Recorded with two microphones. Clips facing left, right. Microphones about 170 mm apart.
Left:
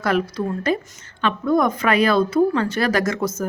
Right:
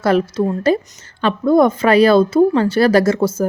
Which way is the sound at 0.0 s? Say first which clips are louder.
Right 6 dB; 30° right (ahead or behind).